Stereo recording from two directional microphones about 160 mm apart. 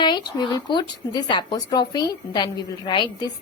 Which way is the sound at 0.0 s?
30° left (ahead or behind).